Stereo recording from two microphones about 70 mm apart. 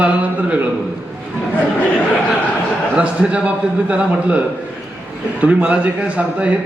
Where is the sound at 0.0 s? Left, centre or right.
Right.